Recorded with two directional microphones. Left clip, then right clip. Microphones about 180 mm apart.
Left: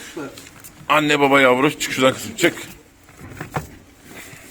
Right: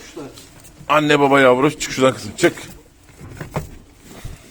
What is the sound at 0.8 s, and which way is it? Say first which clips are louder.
A man's voice: right 2 dB; 25° right (ahead or behind).